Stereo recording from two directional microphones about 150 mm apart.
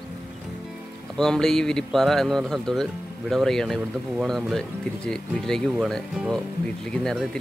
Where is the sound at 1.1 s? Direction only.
5° left (ahead or behind).